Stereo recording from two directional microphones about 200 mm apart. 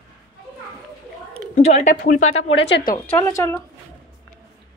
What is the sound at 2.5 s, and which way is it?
Speech, 65° left (ahead or behind).